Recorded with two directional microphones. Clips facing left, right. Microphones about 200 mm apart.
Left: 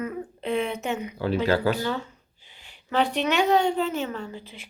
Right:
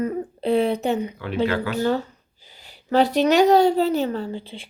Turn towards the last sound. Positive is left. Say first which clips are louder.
# right 7 dB
turn(degrees=-30)  # may be behind; listen again after turning